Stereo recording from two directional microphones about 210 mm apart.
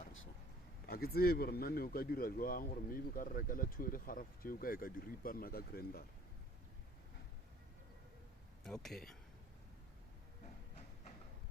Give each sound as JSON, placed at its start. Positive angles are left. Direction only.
{"t": 0.9, "sound": "speech", "side_deg": 45}
{"t": 8.6, "sound": "speech", "side_deg": 0}